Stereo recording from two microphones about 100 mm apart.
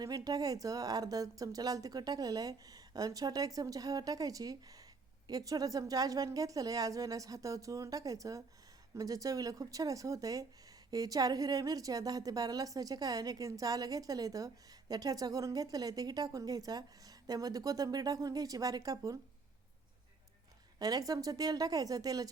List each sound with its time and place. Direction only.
0.0 s a woman's voice: 40° right (ahead or behind)
20.7 s a woman's voice: 40° right (ahead or behind)